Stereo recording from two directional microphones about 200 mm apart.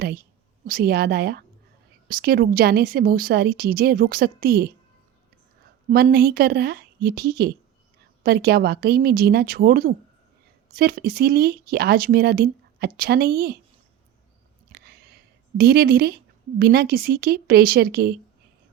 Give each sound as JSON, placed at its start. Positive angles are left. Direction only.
{"t": 0.7, "sound": "speech", "side_deg": -50}
{"t": 5.9, "sound": "speech", "side_deg": -50}
{"t": 14.7, "sound": "a sound", "side_deg": -50}
{"t": 15.5, "sound": "speech", "side_deg": -50}